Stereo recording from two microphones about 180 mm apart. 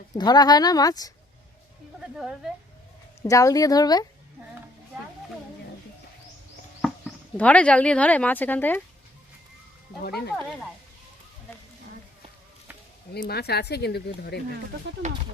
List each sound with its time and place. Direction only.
0.1 s speech: 20° left (ahead or behind)
2.1 s a woman's voice: centre (ahead or behind)
3.2 s speech: 15° left (ahead or behind)
7.3 s speech: 5° left (ahead or behind)
10.0 s speech: 60° left (ahead or behind)
13.1 s speech: 60° left (ahead or behind)
15.0 s speech: 40° right (ahead or behind)